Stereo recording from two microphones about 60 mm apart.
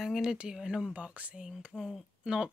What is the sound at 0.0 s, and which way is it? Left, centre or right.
Speech, centre.